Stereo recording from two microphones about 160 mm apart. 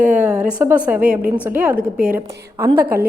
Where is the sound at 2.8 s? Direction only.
70° right (ahead or behind).